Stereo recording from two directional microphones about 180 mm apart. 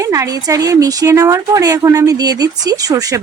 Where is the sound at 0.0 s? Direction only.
20° right (ahead or behind).